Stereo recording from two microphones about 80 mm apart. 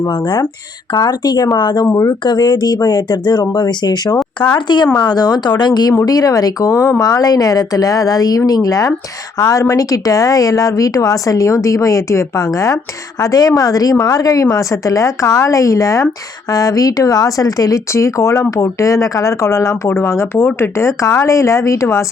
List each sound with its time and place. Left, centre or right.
0.1 s speech: left
1.9 s speech: left
2.2 s speech: left
4.4 s speech: left
6.1 s speech: left
7.0 s speech: left